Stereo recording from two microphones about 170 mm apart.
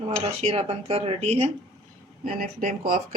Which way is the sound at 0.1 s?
35° right (ahead or behind).